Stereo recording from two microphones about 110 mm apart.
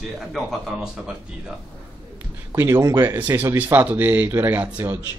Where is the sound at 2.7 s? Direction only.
30° right (ahead or behind).